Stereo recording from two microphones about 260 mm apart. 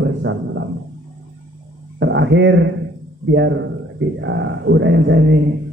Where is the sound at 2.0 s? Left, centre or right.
Right.